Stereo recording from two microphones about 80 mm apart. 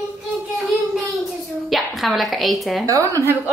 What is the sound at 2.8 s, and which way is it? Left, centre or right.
Speech, right.